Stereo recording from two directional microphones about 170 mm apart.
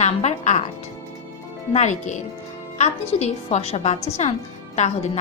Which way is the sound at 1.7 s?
45° left (ahead or behind).